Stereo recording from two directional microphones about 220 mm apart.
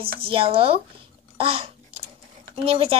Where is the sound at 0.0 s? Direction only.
25° right (ahead or behind).